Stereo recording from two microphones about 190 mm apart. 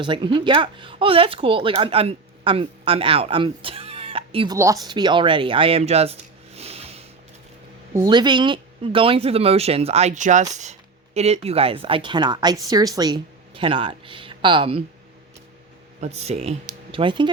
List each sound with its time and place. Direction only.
0.0 s speech: 25° right (ahead or behind)
4.5 s speech: 15° right (ahead or behind); by 7.0 s 35° right (ahead or behind)
7.9 s speech: 20° right (ahead or behind)
16.0 s speech: 35° right (ahead or behind)